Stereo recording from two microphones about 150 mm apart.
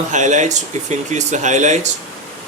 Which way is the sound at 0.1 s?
55° right (ahead or behind).